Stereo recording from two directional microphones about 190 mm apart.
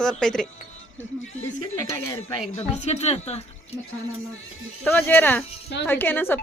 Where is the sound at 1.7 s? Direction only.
15° left (ahead or behind).